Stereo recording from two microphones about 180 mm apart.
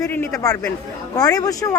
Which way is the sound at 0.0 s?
15° left (ahead or behind).